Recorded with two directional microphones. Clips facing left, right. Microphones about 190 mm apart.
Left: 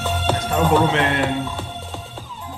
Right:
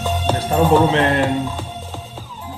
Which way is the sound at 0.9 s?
35° right (ahead or behind).